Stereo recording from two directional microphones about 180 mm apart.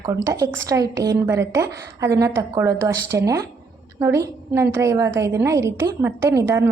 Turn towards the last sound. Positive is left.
turn(degrees=-20)  # may be behind; listen again after turning